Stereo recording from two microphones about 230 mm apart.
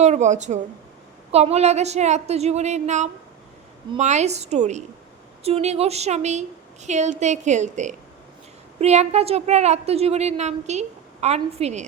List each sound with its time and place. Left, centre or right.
0.0 s a woman's voice: right